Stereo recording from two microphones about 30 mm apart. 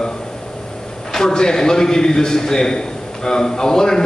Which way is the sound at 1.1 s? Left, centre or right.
Left.